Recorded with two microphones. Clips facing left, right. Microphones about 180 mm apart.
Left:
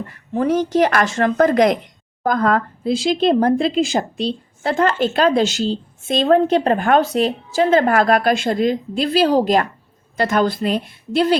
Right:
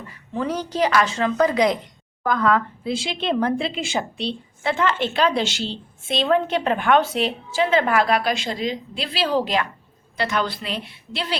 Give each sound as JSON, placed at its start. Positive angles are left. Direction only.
{"t": 0.0, "sound": "speech", "side_deg": 50}